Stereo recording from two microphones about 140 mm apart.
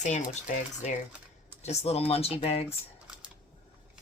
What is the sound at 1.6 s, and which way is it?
Speech, 45° left (ahead or behind).